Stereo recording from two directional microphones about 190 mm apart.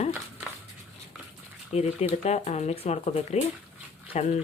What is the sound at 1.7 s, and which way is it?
Speech, 35° left (ahead or behind).